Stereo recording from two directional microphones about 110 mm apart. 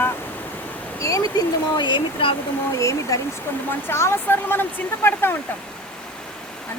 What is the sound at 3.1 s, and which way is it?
Speech, 30° left (ahead or behind).